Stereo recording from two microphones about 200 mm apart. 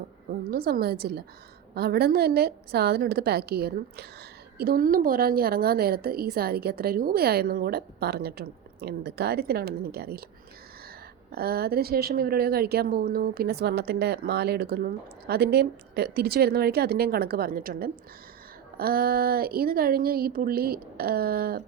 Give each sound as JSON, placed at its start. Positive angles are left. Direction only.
{"t": 0.5, "sound": "a woman's voice", "side_deg": -50}
{"t": 11.3, "sound": "a woman's voice", "side_deg": -50}